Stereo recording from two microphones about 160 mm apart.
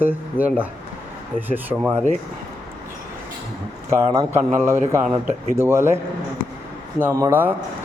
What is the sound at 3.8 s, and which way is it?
A man's voice, 20° right (ahead or behind).